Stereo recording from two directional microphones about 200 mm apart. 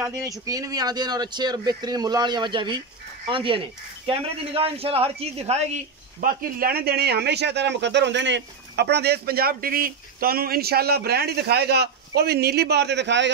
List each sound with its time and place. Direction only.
0.0 s a man's voice: 15° right (ahead or behind)
6.2 s speech: 45° right (ahead or behind); by 13.3 s 60° right (ahead or behind)